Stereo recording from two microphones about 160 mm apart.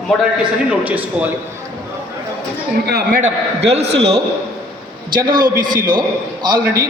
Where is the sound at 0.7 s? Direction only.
10° right (ahead or behind).